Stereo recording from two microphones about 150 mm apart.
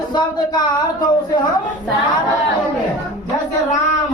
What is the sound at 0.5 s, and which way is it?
Speech, 30° left (ahead or behind).